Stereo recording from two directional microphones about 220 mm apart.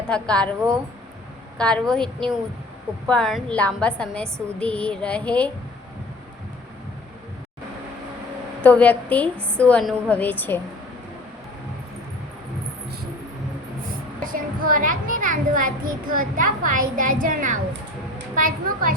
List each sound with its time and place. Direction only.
0.1 s a woman's voice: 5° left (ahead or behind)
1.5 s a woman's voice: 5° left (ahead or behind)
8.6 s a woman's voice: 5° left (ahead or behind)
14.3 s a child's voice: 40° right (ahead or behind)